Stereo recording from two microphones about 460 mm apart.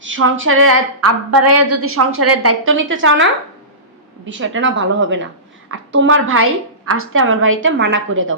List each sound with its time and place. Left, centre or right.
0.0 s a woman's voice: right
4.3 s a woman's voice: right